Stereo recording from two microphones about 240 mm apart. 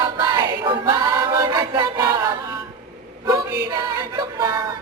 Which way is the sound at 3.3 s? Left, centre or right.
Centre.